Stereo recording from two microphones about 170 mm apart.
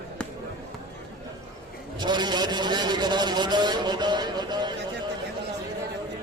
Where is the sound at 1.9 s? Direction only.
25° right (ahead or behind).